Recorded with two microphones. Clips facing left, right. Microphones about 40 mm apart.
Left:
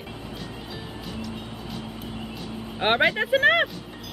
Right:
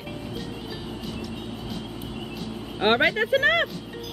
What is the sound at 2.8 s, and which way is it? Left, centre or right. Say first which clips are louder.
Speech: right 1 dB; centre.